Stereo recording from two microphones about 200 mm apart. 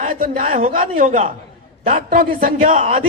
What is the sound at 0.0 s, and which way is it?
A man's voice, 40° right (ahead or behind).